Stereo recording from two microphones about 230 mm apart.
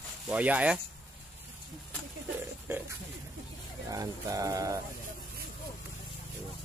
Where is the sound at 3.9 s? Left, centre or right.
Centre.